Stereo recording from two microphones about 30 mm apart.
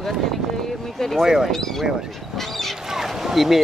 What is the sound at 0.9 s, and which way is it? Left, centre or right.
Speech, centre.